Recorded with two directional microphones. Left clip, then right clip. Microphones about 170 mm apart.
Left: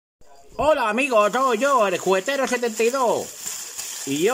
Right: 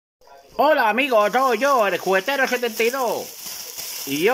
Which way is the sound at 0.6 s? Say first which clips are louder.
Right 2 dB; 20° left (ahead or behind).